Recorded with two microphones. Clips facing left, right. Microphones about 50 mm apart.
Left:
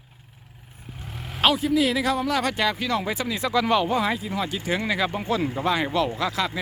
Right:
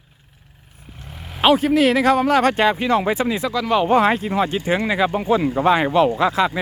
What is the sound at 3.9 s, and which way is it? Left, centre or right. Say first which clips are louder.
Speech: right 8 dB; right.